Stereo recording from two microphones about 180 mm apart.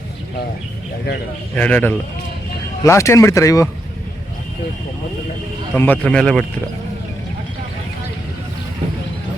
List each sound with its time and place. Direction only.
1.5 s speech: 10° left (ahead or behind)
5.7 s speech: 10° left (ahead or behind)